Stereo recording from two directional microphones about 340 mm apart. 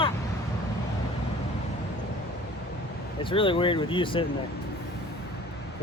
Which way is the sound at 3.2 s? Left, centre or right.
Centre.